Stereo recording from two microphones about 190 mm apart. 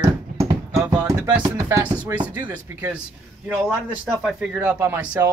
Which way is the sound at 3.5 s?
5° right (ahead or behind).